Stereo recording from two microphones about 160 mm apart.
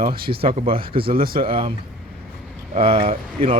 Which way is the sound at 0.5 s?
35° right (ahead or behind).